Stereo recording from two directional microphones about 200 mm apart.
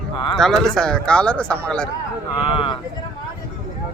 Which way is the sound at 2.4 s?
25° left (ahead or behind).